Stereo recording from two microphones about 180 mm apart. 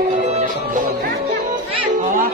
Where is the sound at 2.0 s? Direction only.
45° right (ahead or behind).